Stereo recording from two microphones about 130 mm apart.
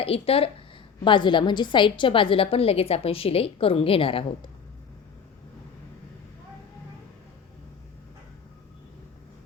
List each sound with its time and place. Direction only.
0.0 s a woman's voice: 50° left (ahead or behind)